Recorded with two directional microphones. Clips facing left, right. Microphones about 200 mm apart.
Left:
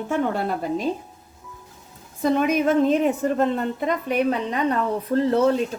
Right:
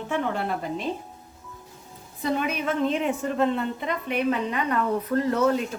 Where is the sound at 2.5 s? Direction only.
40° left (ahead or behind).